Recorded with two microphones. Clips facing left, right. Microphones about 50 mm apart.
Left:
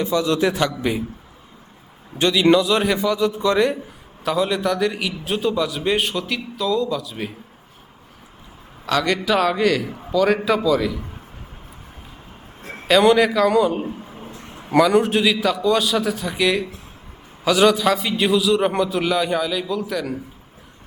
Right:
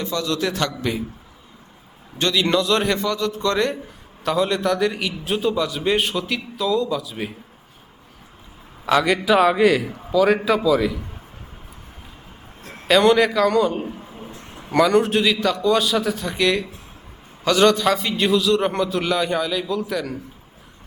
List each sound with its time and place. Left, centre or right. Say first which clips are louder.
0.0 s a man's voice: left 4 dB; centre
2.1 s a man's voice: left 4 dB; centre
8.9 s a man's voice: right 2 dB; centre
12.9 s a man's voice: left 1 dB; centre